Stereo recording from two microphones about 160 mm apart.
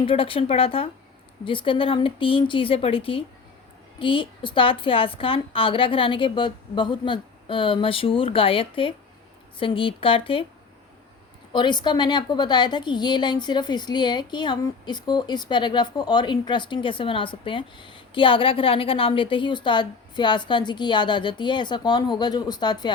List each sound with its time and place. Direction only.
0.0 s a woman's voice: 35° left (ahead or behind)
11.5 s a woman's voice: 30° left (ahead or behind)